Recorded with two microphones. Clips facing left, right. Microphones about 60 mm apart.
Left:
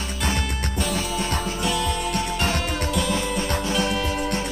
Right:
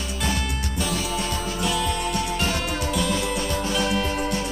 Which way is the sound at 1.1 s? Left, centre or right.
Centre.